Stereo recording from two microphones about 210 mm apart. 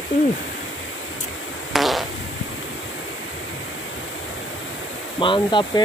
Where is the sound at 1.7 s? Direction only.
Centre (ahead or behind).